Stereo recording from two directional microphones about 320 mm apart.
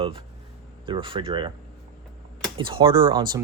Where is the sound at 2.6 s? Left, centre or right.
Centre.